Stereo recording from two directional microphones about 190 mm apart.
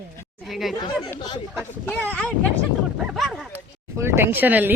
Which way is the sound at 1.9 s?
10° left (ahead or behind).